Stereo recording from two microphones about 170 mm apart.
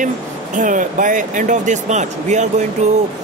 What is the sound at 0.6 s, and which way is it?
Speech, 50° right (ahead or behind).